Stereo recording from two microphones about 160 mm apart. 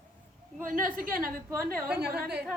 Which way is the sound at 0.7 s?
60° right (ahead or behind).